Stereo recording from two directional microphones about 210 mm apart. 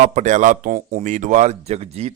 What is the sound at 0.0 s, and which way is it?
Speech, 35° right (ahead or behind).